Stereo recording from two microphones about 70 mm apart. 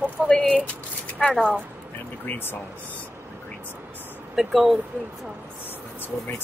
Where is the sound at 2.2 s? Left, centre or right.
Left.